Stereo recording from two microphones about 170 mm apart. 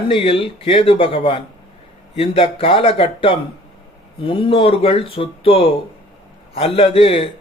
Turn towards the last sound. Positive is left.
turn(degrees=30)  # may be behind; listen again after turning